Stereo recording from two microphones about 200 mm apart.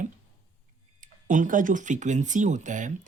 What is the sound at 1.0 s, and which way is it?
Speech, 40° right (ahead or behind).